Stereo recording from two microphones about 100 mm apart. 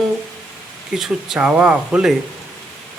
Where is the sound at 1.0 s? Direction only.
5° right (ahead or behind).